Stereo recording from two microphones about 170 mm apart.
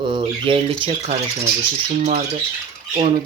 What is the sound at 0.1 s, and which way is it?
Speech, 35° right (ahead or behind).